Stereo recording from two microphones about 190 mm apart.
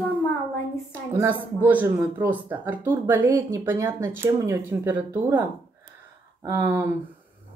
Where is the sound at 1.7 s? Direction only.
10° right (ahead or behind).